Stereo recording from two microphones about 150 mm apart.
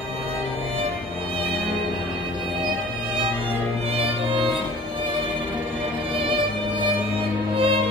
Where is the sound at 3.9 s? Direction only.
35° right (ahead or behind).